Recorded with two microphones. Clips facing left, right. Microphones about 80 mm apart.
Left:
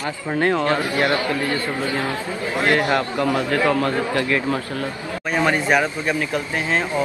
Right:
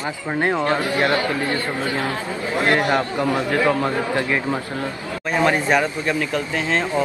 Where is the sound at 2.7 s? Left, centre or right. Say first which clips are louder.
Even; right.